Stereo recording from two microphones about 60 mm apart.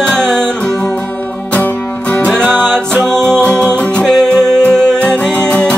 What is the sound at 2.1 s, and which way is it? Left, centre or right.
Music, centre.